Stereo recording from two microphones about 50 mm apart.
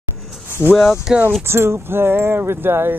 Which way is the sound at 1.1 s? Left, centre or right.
Centre.